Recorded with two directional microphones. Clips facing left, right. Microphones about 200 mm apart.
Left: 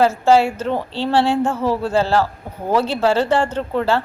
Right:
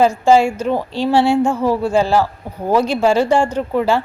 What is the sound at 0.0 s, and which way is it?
Speech, 15° right (ahead or behind).